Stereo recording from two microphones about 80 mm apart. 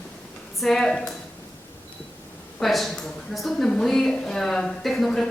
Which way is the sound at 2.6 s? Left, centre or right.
Centre.